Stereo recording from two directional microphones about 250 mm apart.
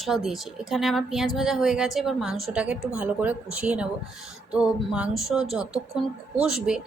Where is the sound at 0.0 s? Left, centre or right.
Centre.